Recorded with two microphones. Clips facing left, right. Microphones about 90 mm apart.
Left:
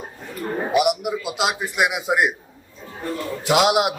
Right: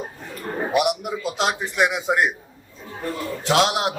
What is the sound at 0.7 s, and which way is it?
A man's voice, centre (ahead or behind).